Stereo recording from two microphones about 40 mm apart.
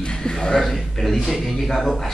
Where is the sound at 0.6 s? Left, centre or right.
Centre.